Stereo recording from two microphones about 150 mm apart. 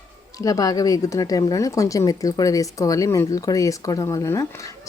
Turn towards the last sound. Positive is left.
turn(degrees=20)  # may be behind; listen again after turning